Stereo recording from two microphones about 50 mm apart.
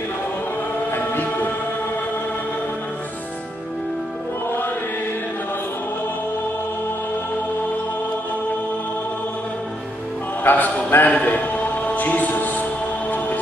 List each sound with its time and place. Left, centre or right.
0.9 s choir: left
10.4 s music: left
11.1 s speech: left
11.3 s music: left